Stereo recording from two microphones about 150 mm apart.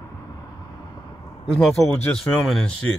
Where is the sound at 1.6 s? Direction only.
5° left (ahead or behind).